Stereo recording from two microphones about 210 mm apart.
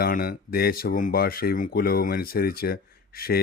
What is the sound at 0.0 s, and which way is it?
Speech, 45° left (ahead or behind).